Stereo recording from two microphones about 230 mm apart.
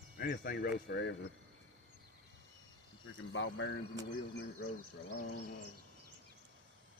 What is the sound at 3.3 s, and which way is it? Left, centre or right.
Speech, left.